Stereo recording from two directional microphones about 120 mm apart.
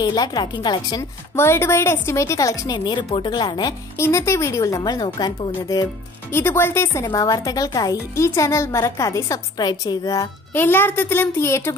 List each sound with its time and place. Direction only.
0.0 s a woman's voice: 35° left (ahead or behind)
1.3 s a woman's voice: 20° left (ahead or behind); by 3.7 s 35° left (ahead or behind)
4.0 s speech: 25° left (ahead or behind)
6.3 s speech: 20° left (ahead or behind)
10.5 s a woman's voice: 15° left (ahead or behind)